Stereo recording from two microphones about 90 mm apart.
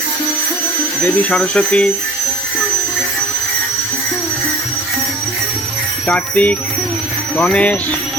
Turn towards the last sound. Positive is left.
turn(degrees=15)  # may be behind; listen again after turning